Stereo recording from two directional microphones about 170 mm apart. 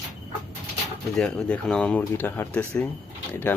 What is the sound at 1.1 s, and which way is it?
Speech, 5° left (ahead or behind).